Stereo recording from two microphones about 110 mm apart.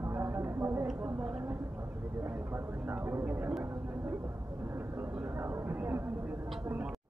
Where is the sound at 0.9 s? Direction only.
15° right (ahead or behind).